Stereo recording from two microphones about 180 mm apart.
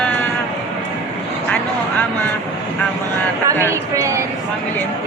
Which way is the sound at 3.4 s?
15° right (ahead or behind).